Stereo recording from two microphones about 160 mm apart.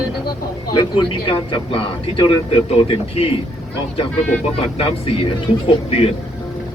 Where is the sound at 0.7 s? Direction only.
25° left (ahead or behind).